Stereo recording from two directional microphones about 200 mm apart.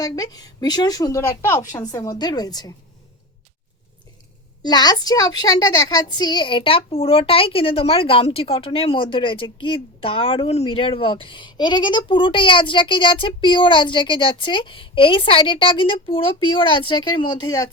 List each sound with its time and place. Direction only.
0.0 s a woman's voice: 20° left (ahead or behind)
4.6 s a woman's voice: 20° left (ahead or behind)